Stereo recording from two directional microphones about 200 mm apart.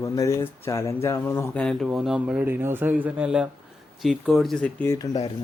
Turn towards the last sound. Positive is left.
turn(degrees=5)  # may be behind; listen again after turning